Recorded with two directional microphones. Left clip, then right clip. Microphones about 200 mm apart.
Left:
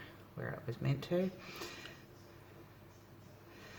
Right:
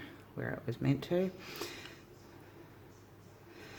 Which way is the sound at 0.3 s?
35° right (ahead or behind).